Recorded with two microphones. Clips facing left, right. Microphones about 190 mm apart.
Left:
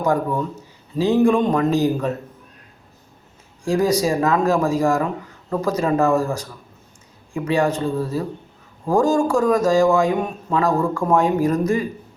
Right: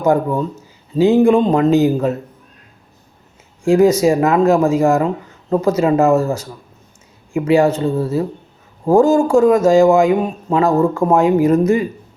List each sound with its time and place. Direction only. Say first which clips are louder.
0.0 s speech: right 5 dB; 25° right (ahead or behind)
3.6 s speech: right 7 dB; 25° right (ahead or behind)